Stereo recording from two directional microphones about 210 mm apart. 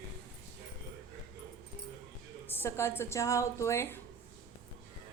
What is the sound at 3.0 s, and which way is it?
A woman's voice, 15° left (ahead or behind).